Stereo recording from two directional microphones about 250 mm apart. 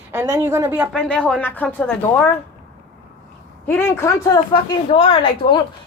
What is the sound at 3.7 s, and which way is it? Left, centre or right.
A woman's voice, centre.